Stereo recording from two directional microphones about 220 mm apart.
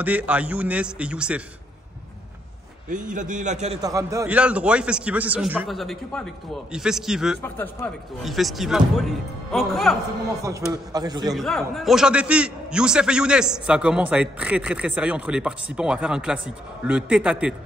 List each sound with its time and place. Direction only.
0.0 s a man's voice: 5° right (ahead or behind)
2.9 s a man's voice: 35° right (ahead or behind)
3.8 s a man's voice: 15° right (ahead or behind)
7.4 s a man's voice: 10° left (ahead or behind)
10.7 s a man's voice: 15° right (ahead or behind)
11.3 s a man's voice: centre (ahead or behind)